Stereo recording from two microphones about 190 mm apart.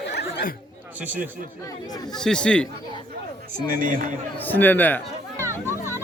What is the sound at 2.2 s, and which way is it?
Speech, 5° left (ahead or behind).